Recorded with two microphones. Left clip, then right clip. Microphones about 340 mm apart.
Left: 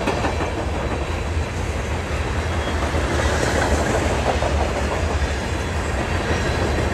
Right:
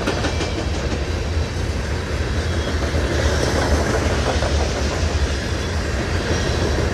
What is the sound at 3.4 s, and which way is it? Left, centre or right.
Vehicle, left.